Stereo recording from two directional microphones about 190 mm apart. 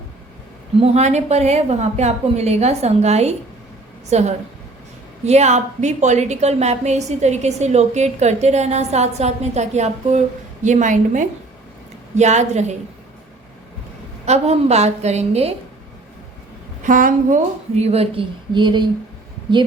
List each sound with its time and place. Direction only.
0.8 s a woman's voice: 35° right (ahead or behind)
14.3 s a woman's voice: 35° right (ahead or behind)
16.8 s a woman's voice: 45° right (ahead or behind); by 18.9 s 25° right (ahead or behind)